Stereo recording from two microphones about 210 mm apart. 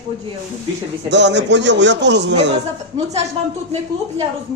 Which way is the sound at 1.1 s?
55° right (ahead or behind).